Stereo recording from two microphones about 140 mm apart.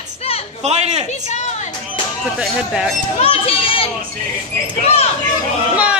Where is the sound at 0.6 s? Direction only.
50° right (ahead or behind).